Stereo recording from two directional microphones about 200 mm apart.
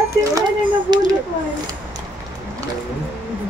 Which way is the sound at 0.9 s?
20° right (ahead or behind).